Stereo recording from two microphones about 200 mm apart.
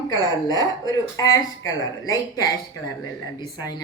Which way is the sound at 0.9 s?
15° left (ahead or behind).